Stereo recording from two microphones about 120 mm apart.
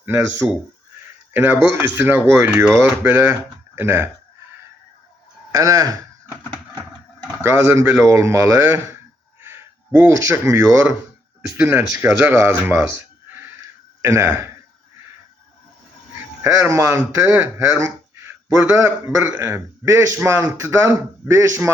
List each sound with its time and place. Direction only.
0.0 s speech: 20° right (ahead or behind)
5.5 s speech: 30° right (ahead or behind)
7.4 s speech: 20° right (ahead or behind)
11.4 s speech: 15° right (ahead or behind)
16.4 s speech: 20° right (ahead or behind)